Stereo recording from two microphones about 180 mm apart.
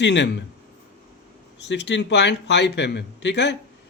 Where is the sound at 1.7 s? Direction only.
75° left (ahead or behind).